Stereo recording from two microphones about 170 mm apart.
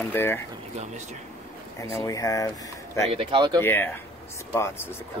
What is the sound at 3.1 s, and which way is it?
Speech, 30° right (ahead or behind).